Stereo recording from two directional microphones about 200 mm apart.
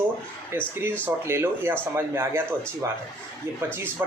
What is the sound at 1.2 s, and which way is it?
A man's voice, 10° right (ahead or behind).